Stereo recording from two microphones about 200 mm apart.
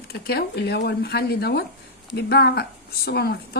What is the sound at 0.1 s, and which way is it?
Speech, 50° left (ahead or behind).